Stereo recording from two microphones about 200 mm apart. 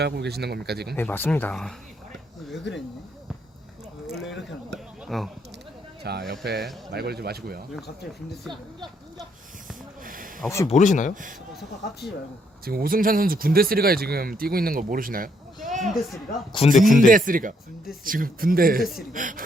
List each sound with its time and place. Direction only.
0.0 s speech: 55° right (ahead or behind)
0.9 s speech: 10° left (ahead or behind)
5.0 s speech: centre (ahead or behind)
6.0 s speech: 55° right (ahead or behind)
10.0 s snake: 45° right (ahead or behind)
10.7 s speech: 35° left (ahead or behind)
11.1 s speech: 40° right (ahead or behind)
12.6 s speech: 45° right (ahead or behind)
16.1 s speech: 25° left (ahead or behind)
16.7 s speech: centre (ahead or behind)
17.1 s speech: 45° right (ahead or behind)